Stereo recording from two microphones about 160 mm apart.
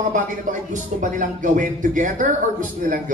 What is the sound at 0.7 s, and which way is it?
Speech, 55° right (ahead or behind).